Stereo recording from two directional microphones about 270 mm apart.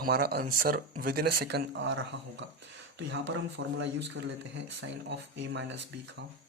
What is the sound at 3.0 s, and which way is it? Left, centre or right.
Speech, right.